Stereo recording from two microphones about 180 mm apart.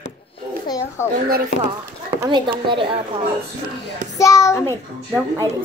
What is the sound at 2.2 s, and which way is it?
Speech, 25° right (ahead or behind).